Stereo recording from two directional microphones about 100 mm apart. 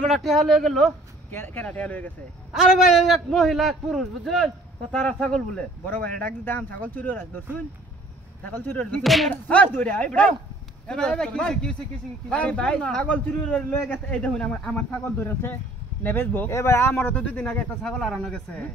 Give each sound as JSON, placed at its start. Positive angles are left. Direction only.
{"t": 0.0, "sound": "a man's voice", "side_deg": 0}
{"t": 1.3, "sound": "a man's voice", "side_deg": 20}
{"t": 2.5, "sound": "a man's voice", "side_deg": 0}
{"t": 5.9, "sound": "a man's voice", "side_deg": 15}
{"t": 9.0, "sound": "a man's voice", "side_deg": 0}
{"t": 9.3, "sound": "a man's voice", "side_deg": 15}
{"t": 17.1, "sound": "a man's voice", "side_deg": 15}